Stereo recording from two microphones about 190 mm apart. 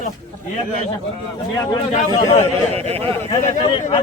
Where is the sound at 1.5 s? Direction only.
15° left (ahead or behind).